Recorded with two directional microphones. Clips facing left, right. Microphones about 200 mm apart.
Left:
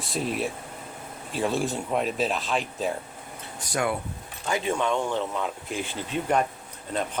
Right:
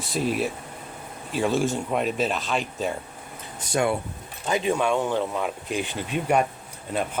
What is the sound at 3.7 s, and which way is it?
Speech, 25° right (ahead or behind).